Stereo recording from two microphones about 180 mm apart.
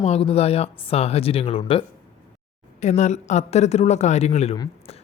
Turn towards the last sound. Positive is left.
turn(degrees=35)  # may be behind; listen again after turning